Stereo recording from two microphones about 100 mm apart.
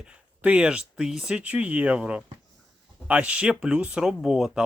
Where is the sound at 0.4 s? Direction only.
10° right (ahead or behind).